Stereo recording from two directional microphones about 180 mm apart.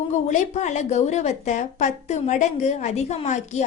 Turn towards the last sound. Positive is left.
turn(degrees=40)  # may be behind; listen again after turning